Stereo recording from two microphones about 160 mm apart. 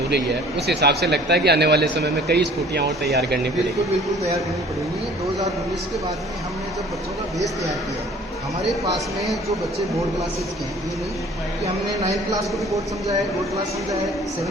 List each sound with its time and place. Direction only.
0.7 s a man's voice: 90° right
12.3 s speech: 20° right (ahead or behind)